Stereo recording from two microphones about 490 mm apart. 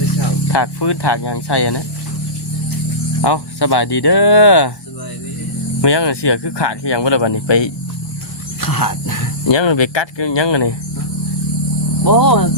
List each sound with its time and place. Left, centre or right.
0.4 s speech: left
3.2 s speech: left
5.8 s speech: left
8.6 s wild animals: left
9.5 s speech: left
12.0 s speech: left